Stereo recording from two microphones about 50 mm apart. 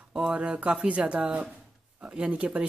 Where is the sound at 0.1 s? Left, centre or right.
Right.